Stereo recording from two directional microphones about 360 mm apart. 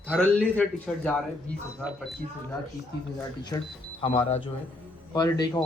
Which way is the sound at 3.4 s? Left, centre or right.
Centre.